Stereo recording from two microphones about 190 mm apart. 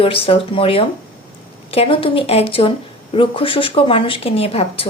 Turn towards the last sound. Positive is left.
turn(degrees=30)  # may be behind; listen again after turning